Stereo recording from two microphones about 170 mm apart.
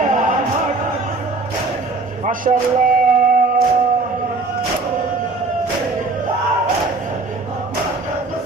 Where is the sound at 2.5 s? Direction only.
40° right (ahead or behind).